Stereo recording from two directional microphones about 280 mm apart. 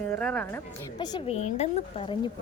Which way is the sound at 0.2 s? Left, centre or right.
Centre.